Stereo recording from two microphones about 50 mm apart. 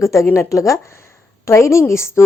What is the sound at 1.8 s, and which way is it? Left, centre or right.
Speech, left.